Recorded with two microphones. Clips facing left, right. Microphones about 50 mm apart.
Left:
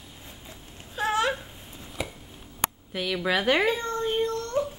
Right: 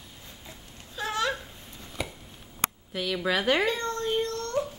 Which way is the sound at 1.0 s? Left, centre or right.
Left.